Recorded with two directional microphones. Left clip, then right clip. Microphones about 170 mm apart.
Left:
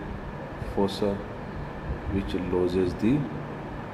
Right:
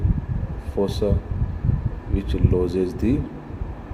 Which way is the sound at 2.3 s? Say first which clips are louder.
Right 3 dB; 50° right (ahead or behind).